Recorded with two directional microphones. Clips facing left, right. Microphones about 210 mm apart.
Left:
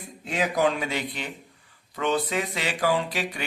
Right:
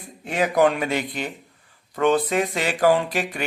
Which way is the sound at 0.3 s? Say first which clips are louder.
Right 5 dB; 60° right (ahead or behind).